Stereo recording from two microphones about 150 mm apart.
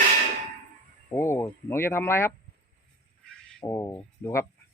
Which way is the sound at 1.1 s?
15° left (ahead or behind).